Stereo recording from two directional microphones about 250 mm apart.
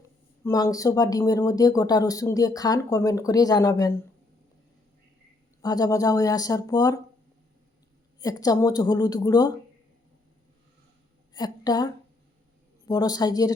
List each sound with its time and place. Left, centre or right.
0.4 s speech: centre
5.6 s speech: centre
8.2 s speech: centre
11.3 s a woman's voice: centre
12.9 s speech: centre